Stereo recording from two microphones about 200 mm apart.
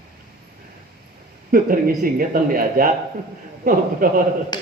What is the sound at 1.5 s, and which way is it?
A man's voice, 45° right (ahead or behind).